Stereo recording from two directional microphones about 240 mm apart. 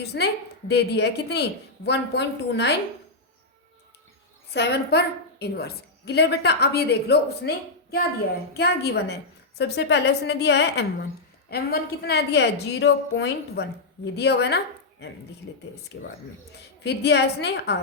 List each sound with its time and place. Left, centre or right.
0.0 s a woman's voice: left
4.5 s a woman's voice: left
16.8 s a woman's voice: left